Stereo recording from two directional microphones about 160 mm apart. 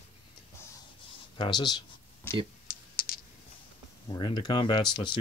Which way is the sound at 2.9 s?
65° left (ahead or behind).